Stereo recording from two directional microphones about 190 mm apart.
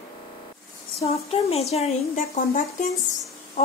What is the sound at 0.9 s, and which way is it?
A woman's voice, 30° left (ahead or behind).